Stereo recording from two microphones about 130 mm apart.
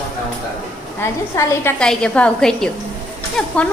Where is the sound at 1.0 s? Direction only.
15° left (ahead or behind).